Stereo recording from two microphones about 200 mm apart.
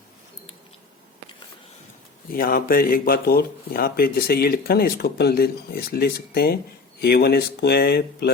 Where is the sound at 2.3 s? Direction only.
50° left (ahead or behind).